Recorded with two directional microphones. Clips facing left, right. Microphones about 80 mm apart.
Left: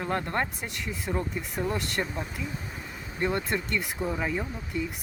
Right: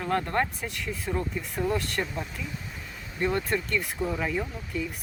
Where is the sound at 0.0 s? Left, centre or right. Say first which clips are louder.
Right 2 dB; left.